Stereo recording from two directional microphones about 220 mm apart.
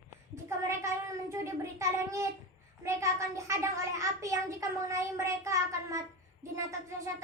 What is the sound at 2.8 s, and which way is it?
A child's voice, 15° right (ahead or behind).